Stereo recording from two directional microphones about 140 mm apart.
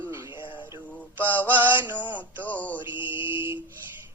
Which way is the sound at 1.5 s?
15° right (ahead or behind).